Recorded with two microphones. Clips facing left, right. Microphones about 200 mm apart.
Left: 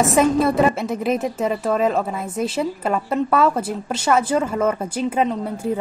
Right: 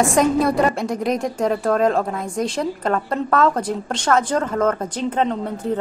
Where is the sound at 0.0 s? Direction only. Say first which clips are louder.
Even; centre (ahead or behind).